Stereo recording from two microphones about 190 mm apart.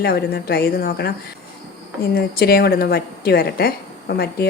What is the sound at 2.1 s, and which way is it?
Speech, 55° left (ahead or behind).